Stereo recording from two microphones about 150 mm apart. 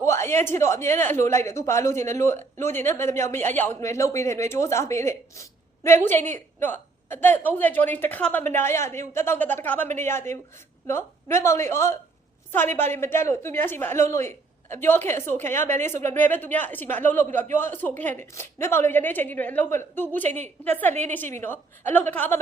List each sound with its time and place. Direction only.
0.0 s speech: 20° left (ahead or behind)